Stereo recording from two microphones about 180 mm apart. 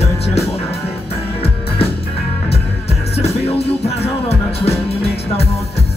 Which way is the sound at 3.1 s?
35° left (ahead or behind).